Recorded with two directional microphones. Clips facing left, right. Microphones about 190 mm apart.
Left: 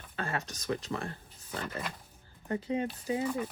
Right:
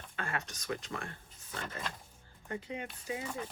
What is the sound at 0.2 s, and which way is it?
Speech, 35° left (ahead or behind).